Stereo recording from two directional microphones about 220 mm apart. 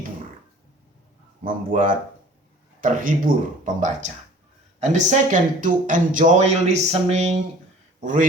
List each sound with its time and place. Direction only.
1.5 s speech: 35° right (ahead or behind)